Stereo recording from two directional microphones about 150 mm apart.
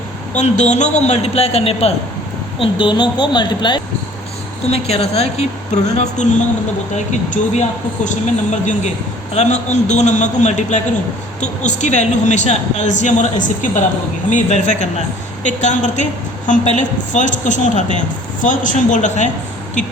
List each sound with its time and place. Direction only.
0.3 s a woman's voice: 50° left (ahead or behind); by 3.8 s 30° left (ahead or behind)
4.7 s a woman's voice: 45° left (ahead or behind)